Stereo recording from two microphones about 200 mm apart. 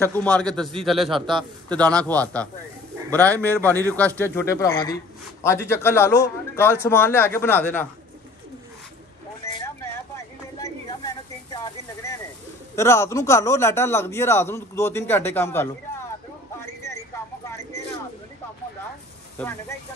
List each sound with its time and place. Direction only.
0.0 s a man's voice: 10° left (ahead or behind)
9.4 s vehicle: 15° left (ahead or behind)
9.9 s a sound: 15° left (ahead or behind)
12.7 s a man's voice: 15° left (ahead or behind)
16.6 s a sound: 15° left (ahead or behind)
19.3 s a man's voice: 10° left (ahead or behind)